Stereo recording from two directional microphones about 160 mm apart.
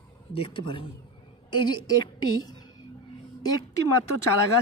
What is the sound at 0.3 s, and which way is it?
Speech, 35° left (ahead or behind).